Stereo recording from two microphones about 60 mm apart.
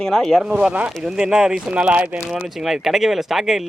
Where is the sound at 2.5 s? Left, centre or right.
Centre.